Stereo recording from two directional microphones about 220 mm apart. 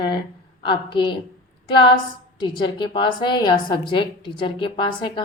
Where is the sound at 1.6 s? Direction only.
20° left (ahead or behind).